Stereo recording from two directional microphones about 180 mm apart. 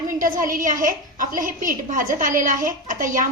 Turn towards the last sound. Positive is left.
turn(degrees=-45)  # may be behind; listen again after turning